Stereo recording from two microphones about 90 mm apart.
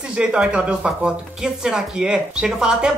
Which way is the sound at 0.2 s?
10° right (ahead or behind).